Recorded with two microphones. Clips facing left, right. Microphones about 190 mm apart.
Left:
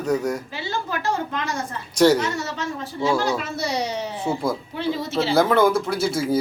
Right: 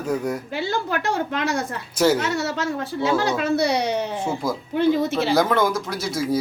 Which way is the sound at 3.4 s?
65° right (ahead or behind).